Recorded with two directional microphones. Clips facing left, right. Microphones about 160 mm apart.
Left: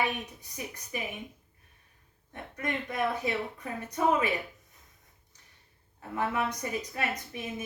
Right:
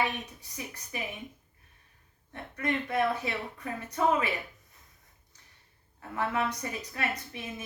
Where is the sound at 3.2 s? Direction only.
15° left (ahead or behind).